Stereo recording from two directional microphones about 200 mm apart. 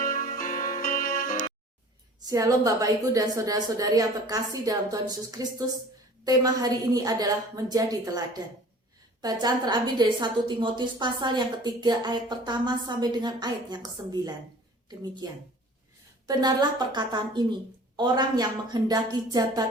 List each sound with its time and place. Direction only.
0.0 s music: 40° left (ahead or behind)
2.2 s a woman's voice: 15° right (ahead or behind)
14.8 s a woman's voice: 20° right (ahead or behind)